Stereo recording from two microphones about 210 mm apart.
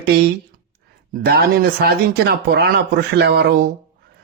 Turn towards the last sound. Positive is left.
turn(degrees=-50)  # may be behind; listen again after turning